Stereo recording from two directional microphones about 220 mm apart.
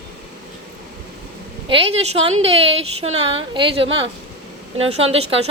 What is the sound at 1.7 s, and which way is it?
A woman's voice, 25° right (ahead or behind).